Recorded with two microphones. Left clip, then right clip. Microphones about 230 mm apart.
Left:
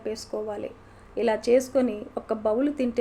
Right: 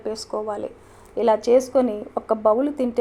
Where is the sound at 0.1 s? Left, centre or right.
Centre.